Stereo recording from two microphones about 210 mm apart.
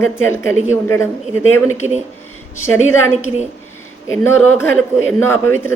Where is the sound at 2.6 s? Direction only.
75° left (ahead or behind).